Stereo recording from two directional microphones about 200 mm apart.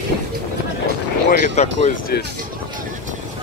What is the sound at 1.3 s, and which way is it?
Speech, 35° left (ahead or behind).